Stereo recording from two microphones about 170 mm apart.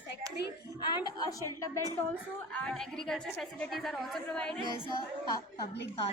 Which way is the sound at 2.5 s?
5° left (ahead or behind).